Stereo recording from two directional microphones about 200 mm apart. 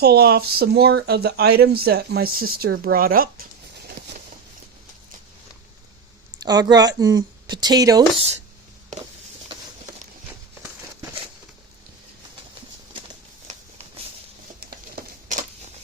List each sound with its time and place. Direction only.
0.0 s speech: 55° right (ahead or behind)
6.4 s speech: 20° right (ahead or behind)